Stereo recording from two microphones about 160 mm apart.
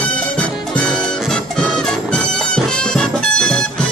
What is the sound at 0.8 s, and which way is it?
Music, 5° left (ahead or behind).